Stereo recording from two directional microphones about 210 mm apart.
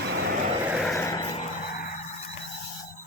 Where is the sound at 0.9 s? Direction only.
15° left (ahead or behind).